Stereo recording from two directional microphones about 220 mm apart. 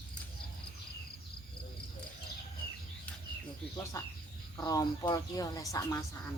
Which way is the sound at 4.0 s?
15° left (ahead or behind).